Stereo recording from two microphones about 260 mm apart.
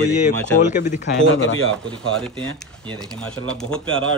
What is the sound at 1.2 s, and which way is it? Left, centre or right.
Speech, left.